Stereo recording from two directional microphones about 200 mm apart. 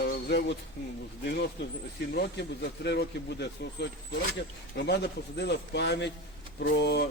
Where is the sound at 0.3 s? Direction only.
55° left (ahead or behind).